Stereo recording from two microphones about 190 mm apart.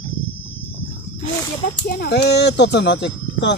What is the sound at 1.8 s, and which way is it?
Speech, 60° left (ahead or behind).